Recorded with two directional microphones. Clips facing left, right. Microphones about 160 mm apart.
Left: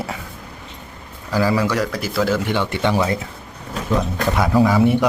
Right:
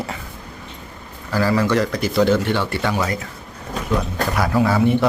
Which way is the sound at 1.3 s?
10° left (ahead or behind).